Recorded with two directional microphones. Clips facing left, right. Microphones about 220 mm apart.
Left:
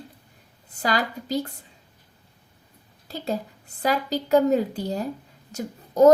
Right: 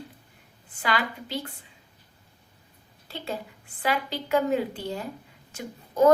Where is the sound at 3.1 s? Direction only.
40° left (ahead or behind).